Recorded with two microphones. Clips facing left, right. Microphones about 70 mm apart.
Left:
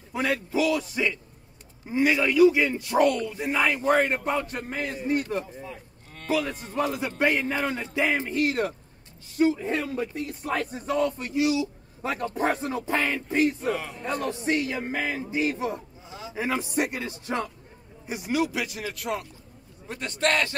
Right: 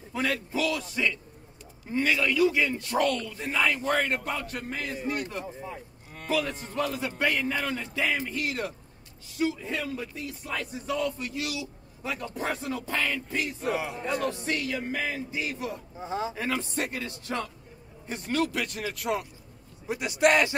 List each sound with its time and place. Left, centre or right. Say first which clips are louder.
0.1 s a man's voice: left 3 dB; centre
5.6 s cattle: right 1 dB; centre
6.2 s a man's voice: left 2 dB; centre
6.8 s a man's voice: left 3 dB; centre; by 8.7 s left
9.4 s a sound: left 6 dB; left
11.3 s a man's voice: left 10 dB; left
12.0 s a sound: left 6 dB; left
12.8 s a man's voice: left 4 dB; left
13.7 s a man's voice: right 1 dB; centre
14.2 s a man's voice: left 3 dB; left
16.0 s a sound: right 9 dB; right
16.3 s a man's voice: left 4 dB; centre
18.0 s a man's voice: left 2 dB; centre